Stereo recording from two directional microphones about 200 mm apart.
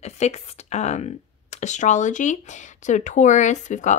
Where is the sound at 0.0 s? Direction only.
35° left (ahead or behind).